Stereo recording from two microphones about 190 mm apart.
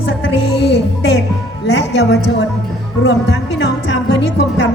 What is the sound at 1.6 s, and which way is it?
Speech, 70° left (ahead or behind).